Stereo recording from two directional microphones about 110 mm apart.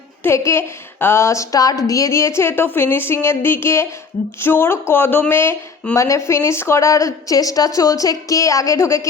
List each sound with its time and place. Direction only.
0.2 s a woman's voice: 25° left (ahead or behind)